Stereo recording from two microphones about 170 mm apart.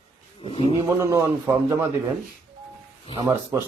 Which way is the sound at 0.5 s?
35° left (ahead or behind).